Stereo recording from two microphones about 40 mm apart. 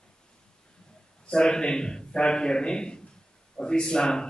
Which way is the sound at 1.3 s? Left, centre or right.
Centre.